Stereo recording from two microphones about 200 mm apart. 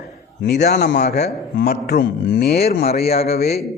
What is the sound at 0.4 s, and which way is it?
A man's voice, 60° left (ahead or behind).